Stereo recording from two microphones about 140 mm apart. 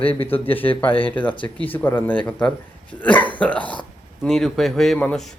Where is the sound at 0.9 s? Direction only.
40° left (ahead or behind).